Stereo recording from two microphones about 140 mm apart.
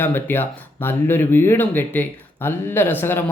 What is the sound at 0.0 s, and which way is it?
Speech, 15° left (ahead or behind).